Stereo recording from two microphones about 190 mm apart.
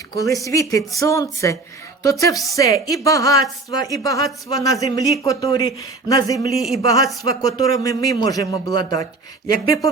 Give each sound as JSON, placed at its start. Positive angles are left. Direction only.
{"t": 0.2, "sound": "speech", "side_deg": 15}
{"t": 6.5, "sound": "speech", "side_deg": 0}
{"t": 6.8, "sound": "a man's voice", "side_deg": 20}